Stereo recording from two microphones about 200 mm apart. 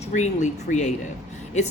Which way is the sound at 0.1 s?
40° left (ahead or behind).